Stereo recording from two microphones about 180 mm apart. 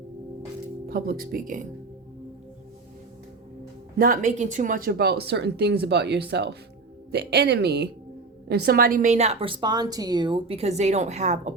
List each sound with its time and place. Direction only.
0.9 s speech: 55° right (ahead or behind)
3.9 s a woman's voice: 50° right (ahead or behind)